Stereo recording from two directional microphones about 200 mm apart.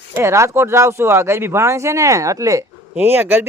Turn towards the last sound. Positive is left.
turn(degrees=-10)  # may be behind; listen again after turning